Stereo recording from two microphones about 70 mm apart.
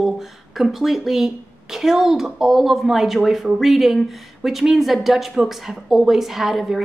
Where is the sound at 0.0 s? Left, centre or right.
Centre.